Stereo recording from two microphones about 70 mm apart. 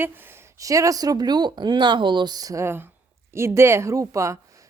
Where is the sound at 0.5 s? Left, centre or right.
Right.